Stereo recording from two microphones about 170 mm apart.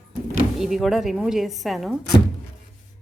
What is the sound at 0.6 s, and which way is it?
A woman's voice, centre (ahead or behind).